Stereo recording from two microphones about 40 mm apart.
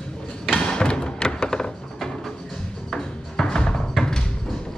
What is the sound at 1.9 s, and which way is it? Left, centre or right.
Music, centre.